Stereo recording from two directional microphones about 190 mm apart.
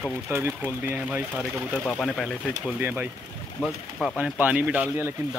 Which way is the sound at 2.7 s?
10° right (ahead or behind).